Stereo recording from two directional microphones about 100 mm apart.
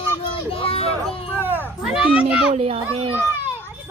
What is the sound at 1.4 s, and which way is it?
A child's voice, 20° right (ahead or behind).